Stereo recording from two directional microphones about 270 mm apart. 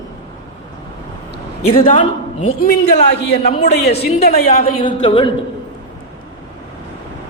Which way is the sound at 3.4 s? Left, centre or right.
Left.